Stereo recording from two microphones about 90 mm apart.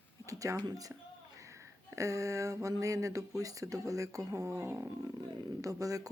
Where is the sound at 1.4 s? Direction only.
35° right (ahead or behind).